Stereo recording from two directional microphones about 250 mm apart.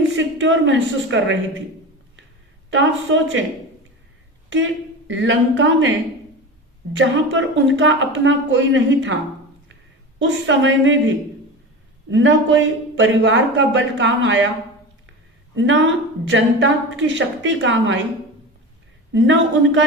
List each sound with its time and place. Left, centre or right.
0.2 s a woman's voice: right
2.6 s a woman's voice: right
4.4 s a woman's voice: right
6.9 s a woman's voice: right
10.2 s a woman's voice: right
12.1 s a woman's voice: right
15.5 s a woman's voice: right
19.1 s a woman's voice: right